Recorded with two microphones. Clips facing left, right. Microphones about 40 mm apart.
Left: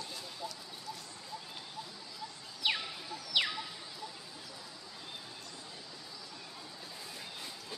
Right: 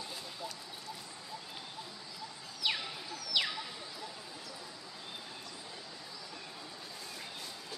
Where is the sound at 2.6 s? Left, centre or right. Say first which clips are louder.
Left 1 dB; centre.